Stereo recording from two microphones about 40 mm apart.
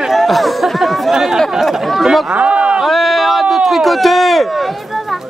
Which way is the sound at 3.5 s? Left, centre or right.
Centre.